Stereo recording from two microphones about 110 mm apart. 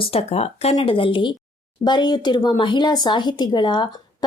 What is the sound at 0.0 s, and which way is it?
Speech, 65° left (ahead or behind).